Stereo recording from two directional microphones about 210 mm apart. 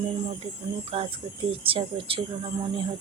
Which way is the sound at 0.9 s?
25° right (ahead or behind).